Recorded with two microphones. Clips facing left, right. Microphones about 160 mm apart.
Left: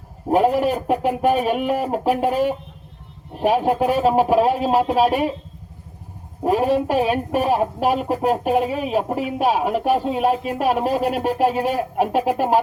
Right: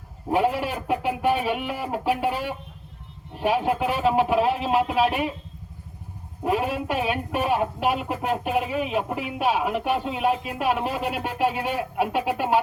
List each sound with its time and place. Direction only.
0.3 s speech: 40° left (ahead or behind)
6.4 s speech: 40° left (ahead or behind)